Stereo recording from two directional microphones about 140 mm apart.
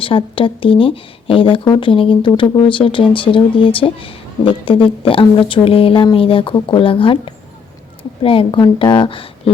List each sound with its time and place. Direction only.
0.0 s speech: 40° left (ahead or behind)